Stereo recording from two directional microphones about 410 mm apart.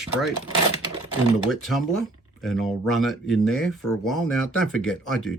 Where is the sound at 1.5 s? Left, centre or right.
Centre.